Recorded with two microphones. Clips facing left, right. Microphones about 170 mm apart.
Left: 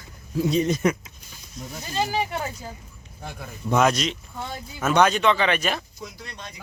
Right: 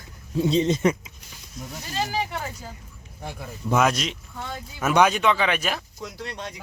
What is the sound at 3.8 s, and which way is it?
Speech, 5° right (ahead or behind).